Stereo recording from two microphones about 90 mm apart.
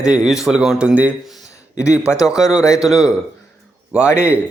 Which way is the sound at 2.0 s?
35° left (ahead or behind).